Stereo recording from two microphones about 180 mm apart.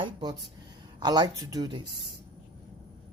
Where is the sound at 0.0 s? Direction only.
25° right (ahead or behind).